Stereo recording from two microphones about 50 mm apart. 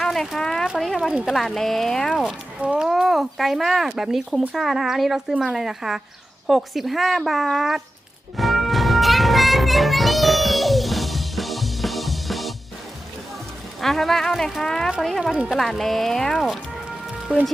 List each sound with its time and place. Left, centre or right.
0.0 s a sound: centre
0.9 s speech: centre
1.3 s speech: centre
2.6 s speech: right
2.8 s speech: centre
8.4 s music: centre
13.8 s speech: centre